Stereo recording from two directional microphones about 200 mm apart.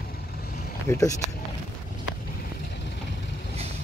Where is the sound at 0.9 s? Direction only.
15° left (ahead or behind).